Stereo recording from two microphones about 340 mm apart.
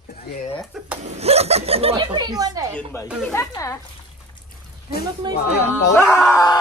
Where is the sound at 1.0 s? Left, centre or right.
Centre.